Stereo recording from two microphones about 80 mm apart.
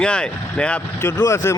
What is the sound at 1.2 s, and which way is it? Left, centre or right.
Speech, left.